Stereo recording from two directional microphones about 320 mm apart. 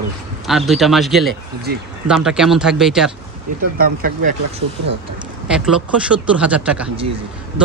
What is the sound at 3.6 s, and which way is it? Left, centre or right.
Speech, right.